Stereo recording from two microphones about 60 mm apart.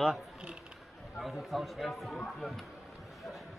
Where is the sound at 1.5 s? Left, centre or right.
Centre.